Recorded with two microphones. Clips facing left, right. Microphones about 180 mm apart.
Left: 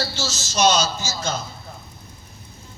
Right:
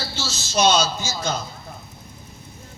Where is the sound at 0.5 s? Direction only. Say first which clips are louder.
Right 1 dB; 55° right (ahead or behind).